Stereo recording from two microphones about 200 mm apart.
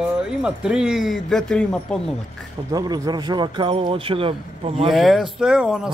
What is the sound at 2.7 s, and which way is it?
A man's voice, 20° right (ahead or behind).